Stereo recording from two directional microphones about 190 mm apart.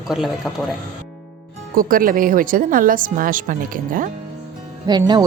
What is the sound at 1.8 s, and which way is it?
A woman's voice, 50° right (ahead or behind).